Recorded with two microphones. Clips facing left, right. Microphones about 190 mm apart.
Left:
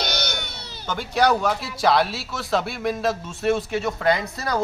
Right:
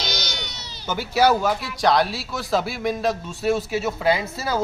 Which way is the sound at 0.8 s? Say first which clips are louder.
Right 1 dB; 5° right (ahead or behind).